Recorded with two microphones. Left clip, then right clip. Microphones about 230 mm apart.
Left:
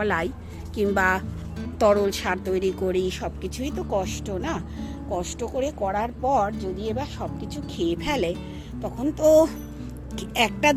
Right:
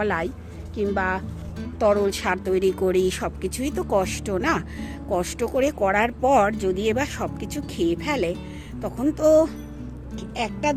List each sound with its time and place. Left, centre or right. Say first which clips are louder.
0.0 s speech: even; centre; by 7.9 s right
7.9 s speech: right 1 dB; centre
10.2 s speech: left 5 dB; centre